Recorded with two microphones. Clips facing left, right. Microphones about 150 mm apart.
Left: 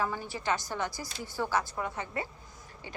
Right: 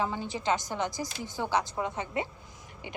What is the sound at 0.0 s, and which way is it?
A woman's voice, 20° right (ahead or behind).